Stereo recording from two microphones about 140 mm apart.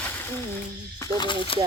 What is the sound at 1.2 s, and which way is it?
Speech, 35° left (ahead or behind).